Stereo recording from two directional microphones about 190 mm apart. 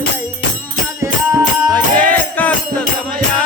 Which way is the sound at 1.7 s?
10° left (ahead or behind).